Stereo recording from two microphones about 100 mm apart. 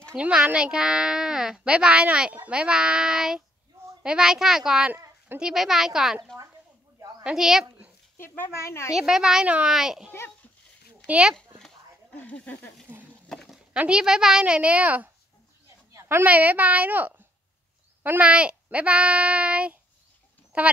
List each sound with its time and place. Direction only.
0.1 s a child's voice: 10° right (ahead or behind)
4.9 s a sound: 25° right (ahead or behind)
5.4 s a child's voice: 5° right (ahead or behind)
7.0 s a sound: 40° right (ahead or behind)
7.2 s a child's voice: 5° right (ahead or behind)
8.2 s speech: 25° left (ahead or behind)
8.9 s a child's voice: 5° right (ahead or behind)
11.3 s a sound: 5° left (ahead or behind)
12.2 s speech: 15° left (ahead or behind)
13.3 s a sound: 5° left (ahead or behind)
13.7 s a child's voice: 10° right (ahead or behind)
15.9 s a child's voice: 25° right (ahead or behind)